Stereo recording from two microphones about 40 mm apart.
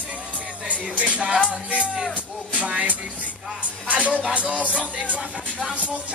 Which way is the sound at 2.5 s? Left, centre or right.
Right.